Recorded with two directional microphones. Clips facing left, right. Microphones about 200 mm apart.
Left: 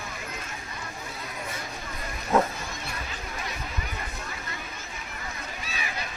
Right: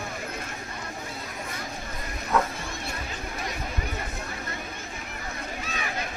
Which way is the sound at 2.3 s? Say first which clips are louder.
Left 2 dB; 30° left (ahead or behind).